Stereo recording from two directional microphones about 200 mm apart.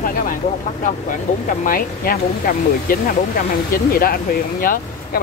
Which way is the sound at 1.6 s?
45° left (ahead or behind).